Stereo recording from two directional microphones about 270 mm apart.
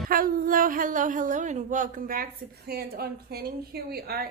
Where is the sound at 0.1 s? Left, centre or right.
Right.